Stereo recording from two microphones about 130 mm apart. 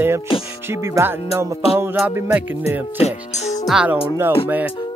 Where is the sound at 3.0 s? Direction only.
60° left (ahead or behind).